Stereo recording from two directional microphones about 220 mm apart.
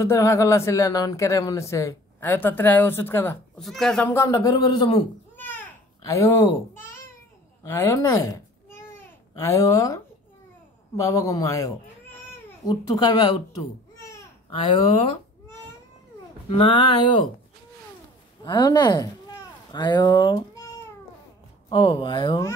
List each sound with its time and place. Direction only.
0.0 s speech: 15° left (ahead or behind)
6.0 s speech: 15° left (ahead or behind)
7.6 s speech: 10° left (ahead or behind)
9.4 s speech: 15° left (ahead or behind)
13.9 s babbling: 15° left (ahead or behind)
16.4 s speech: 25° left (ahead or behind)
17.0 s speech: 90° left
18.4 s speech: 20° left (ahead or behind)